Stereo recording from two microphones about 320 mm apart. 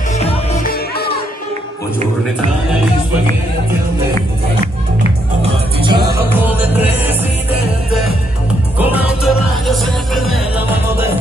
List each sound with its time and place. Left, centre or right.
0.2 s music: centre
5.4 s music: centre
8.7 s music: centre